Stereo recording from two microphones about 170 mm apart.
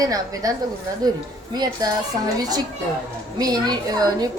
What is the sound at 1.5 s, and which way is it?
Speech, 25° right (ahead or behind).